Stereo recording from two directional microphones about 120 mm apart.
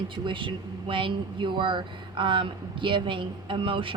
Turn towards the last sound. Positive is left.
turn(degrees=-45)  # may be behind; listen again after turning